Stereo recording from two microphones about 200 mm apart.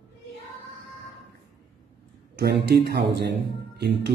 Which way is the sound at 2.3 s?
55° right (ahead or behind).